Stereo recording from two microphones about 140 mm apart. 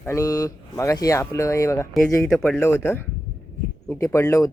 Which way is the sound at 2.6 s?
15° left (ahead or behind).